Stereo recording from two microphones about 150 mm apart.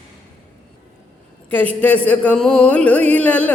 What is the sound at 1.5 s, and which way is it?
Speech, 10° left (ahead or behind).